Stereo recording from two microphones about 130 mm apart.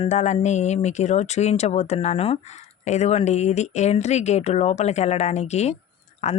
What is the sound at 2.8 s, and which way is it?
Speech, 60° left (ahead or behind).